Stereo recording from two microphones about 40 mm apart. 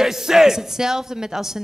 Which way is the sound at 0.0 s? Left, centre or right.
Centre.